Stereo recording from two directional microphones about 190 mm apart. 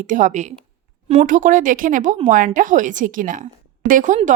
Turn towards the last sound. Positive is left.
turn(degrees=-40)  # may be behind; listen again after turning